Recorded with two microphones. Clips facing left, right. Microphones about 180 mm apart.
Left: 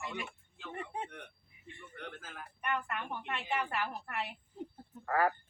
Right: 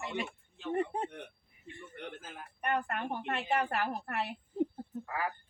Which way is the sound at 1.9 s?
25° right (ahead or behind).